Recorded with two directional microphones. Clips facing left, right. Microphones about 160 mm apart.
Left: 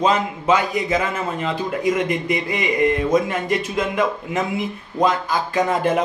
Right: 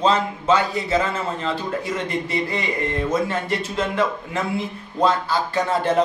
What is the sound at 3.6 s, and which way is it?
A man's voice, 15° left (ahead or behind).